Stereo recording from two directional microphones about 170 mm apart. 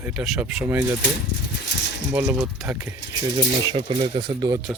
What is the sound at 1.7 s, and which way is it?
Coin, 90° left.